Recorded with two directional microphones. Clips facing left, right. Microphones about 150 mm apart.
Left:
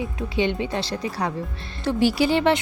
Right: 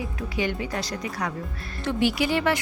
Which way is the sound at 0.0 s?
25° left (ahead or behind).